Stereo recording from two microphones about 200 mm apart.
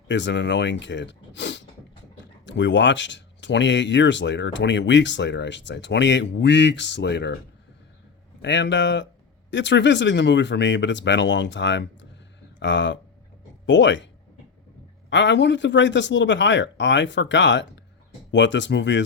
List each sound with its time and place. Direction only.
0.1 s speech: 60° left (ahead or behind)
8.4 s speech: 60° left (ahead or behind)
15.1 s speech: 60° left (ahead or behind)